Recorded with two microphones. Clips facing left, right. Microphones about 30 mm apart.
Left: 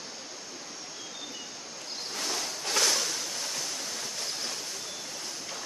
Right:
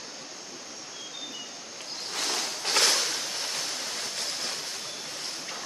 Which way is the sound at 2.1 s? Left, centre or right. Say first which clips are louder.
Right 3 dB; right.